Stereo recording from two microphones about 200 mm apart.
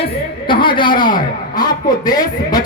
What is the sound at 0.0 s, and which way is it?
A man's voice, 25° left (ahead or behind).